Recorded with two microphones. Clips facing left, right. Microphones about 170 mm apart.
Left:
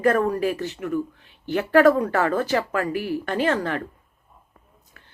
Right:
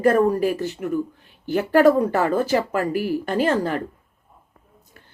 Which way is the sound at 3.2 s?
35° right (ahead or behind).